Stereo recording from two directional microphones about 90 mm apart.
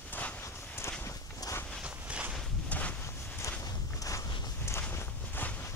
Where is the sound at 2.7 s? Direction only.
15° left (ahead or behind).